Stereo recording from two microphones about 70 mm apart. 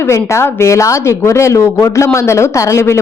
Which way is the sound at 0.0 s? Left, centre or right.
Left.